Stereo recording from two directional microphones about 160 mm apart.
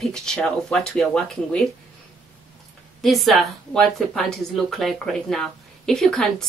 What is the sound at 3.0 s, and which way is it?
Speech, centre (ahead or behind).